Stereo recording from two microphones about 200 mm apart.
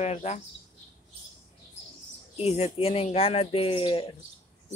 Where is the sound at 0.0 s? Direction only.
35° left (ahead or behind).